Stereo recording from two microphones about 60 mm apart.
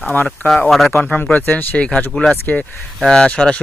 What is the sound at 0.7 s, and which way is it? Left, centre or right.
Speech, centre.